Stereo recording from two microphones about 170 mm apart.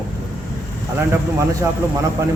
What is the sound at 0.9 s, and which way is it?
Speech, 20° right (ahead or behind).